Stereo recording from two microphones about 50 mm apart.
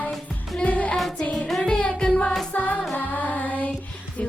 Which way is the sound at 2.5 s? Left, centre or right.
Left.